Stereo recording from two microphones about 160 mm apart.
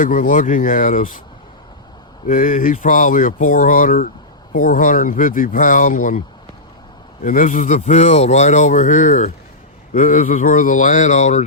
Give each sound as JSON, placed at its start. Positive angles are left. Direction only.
{"t": 0.0, "sound": "speech", "side_deg": 55}
{"t": 2.2, "sound": "speech", "side_deg": 55}
{"t": 7.3, "sound": "speech", "side_deg": 55}